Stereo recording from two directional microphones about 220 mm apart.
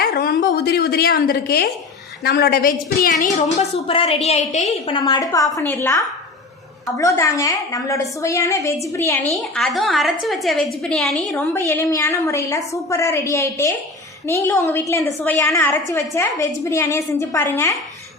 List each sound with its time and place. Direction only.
0.0 s a woman's voice: 40° left (ahead or behind)
4.9 s a woman's voice: 20° left (ahead or behind)
9.3 s a woman's voice: centre (ahead or behind)
11.5 s a woman's voice: 10° left (ahead or behind)